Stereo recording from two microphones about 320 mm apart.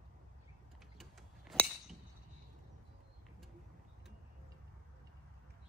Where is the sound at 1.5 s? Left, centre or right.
Centre.